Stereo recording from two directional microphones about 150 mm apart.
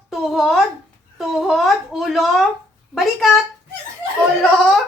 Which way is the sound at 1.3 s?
Centre (ahead or behind).